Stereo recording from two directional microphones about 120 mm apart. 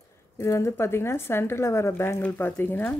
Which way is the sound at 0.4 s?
25° left (ahead or behind).